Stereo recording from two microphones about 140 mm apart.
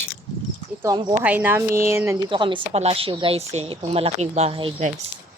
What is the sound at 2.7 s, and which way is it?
Speech, 45° right (ahead or behind).